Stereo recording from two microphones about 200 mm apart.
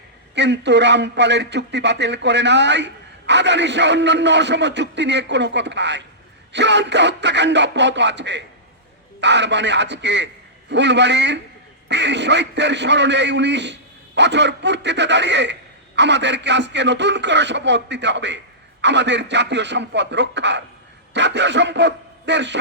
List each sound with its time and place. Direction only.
0.3 s a man's voice: 60° right (ahead or behind)